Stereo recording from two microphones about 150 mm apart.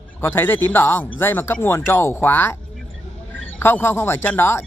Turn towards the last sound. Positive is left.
turn(degrees=15)  # may be behind; listen again after turning